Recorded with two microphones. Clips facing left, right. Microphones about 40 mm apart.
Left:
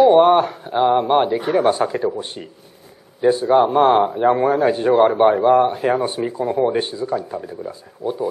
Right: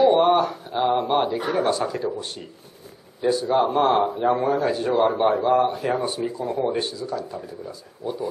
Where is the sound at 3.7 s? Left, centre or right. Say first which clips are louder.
Left 5 dB; left.